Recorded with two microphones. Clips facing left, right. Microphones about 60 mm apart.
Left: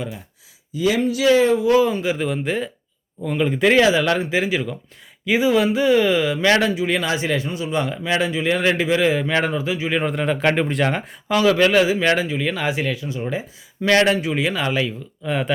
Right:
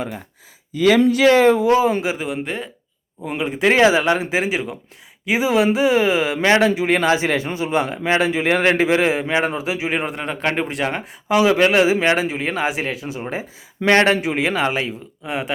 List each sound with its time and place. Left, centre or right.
0.8 s speech: right
1.1 s a man's voice: right
1.5 s a man's voice: right
2.1 s speech: centre
3.2 s speech: centre
3.4 s speech: centre
3.7 s speech: right
6.7 s a man's voice: right
10.2 s speech: centre
11.3 s a man's voice: centre
15.3 s speech: centre